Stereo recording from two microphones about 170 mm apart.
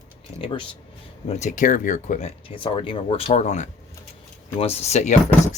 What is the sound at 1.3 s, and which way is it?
Speech, 45° left (ahead or behind).